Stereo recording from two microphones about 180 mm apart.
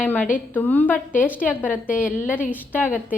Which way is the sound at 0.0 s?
10° left (ahead or behind).